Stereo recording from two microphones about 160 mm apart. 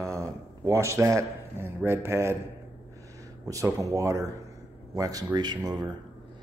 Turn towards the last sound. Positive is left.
turn(degrees=-25)  # may be behind; listen again after turning